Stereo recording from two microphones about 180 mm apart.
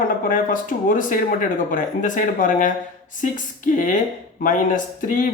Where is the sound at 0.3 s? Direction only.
50° left (ahead or behind).